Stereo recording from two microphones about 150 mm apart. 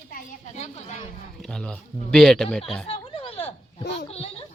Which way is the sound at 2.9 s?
40° left (ahead or behind).